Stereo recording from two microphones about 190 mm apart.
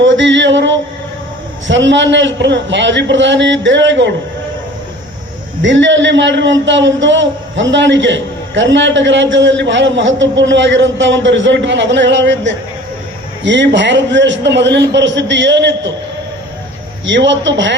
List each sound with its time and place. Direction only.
0.0 s a man's voice: 70° right (ahead or behind)
5.6 s a man's voice: 75° right (ahead or behind)
17.1 s a man's voice: 70° right (ahead or behind)